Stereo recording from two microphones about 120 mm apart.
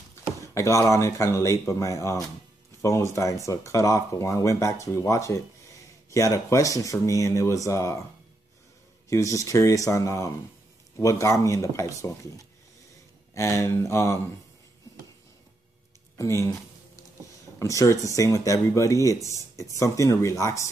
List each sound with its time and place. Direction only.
0.6 s speech: 25° left (ahead or behind)
9.1 s speech: 25° left (ahead or behind)
13.3 s speech: 25° left (ahead or behind)
16.2 s a sound: 25° left (ahead or behind)
17.6 s speech: 25° left (ahead or behind)